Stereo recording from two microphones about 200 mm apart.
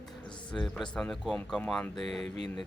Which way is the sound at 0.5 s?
5° left (ahead or behind).